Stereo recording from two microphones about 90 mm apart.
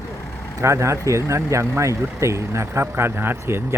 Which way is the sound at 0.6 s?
35° right (ahead or behind).